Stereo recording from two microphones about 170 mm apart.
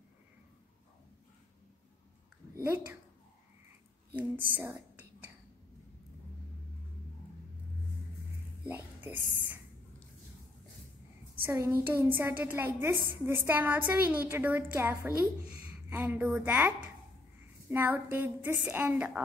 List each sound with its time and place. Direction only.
2.5 s a woman's voice: 15° right (ahead or behind)
4.2 s speech: 10° right (ahead or behind)
8.6 s a sound: 10° right (ahead or behind)
11.4 s a woman's voice: 15° right (ahead or behind)